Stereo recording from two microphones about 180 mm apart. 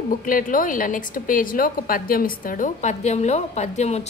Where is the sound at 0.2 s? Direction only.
50° left (ahead or behind).